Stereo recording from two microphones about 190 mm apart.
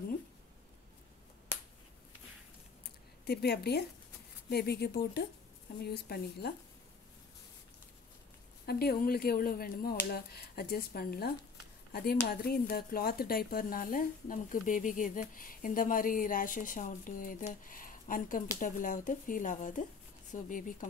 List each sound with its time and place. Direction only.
3.3 s speech: 60° left (ahead or behind)
8.6 s a woman's voice: 55° left (ahead or behind)